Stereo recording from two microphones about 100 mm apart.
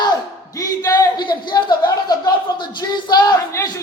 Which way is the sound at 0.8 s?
35° left (ahead or behind).